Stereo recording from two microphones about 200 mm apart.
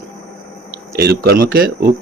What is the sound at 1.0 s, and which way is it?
Speech, 50° right (ahead or behind).